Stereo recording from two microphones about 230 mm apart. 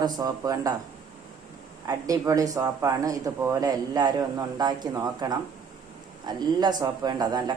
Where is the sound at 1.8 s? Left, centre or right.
Centre.